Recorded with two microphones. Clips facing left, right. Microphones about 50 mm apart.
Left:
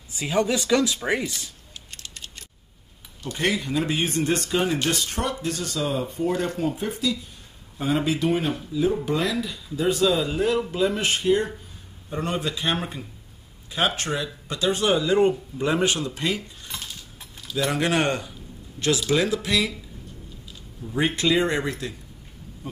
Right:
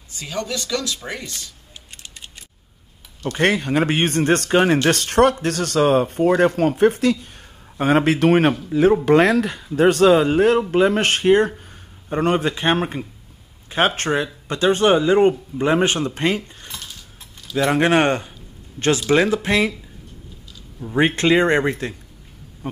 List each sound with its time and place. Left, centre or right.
0.1 s speech: centre
3.3 s speech: right
20.8 s speech: right